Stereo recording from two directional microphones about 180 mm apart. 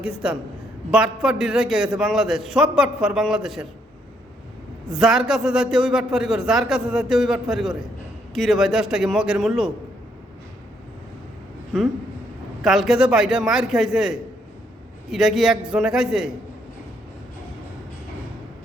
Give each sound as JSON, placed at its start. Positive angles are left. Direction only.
{"t": 0.0, "sound": "a man's voice", "side_deg": -5}
{"t": 4.9, "sound": "a man's voice", "side_deg": 0}
{"t": 11.7, "sound": "a man's voice", "side_deg": 0}